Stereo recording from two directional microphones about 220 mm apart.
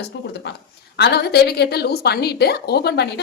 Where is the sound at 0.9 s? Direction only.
50° left (ahead or behind).